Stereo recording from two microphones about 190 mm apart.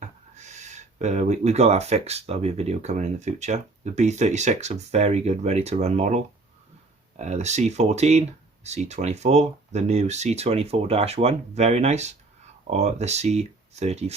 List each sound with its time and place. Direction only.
0.3 s speech: 40° right (ahead or behind)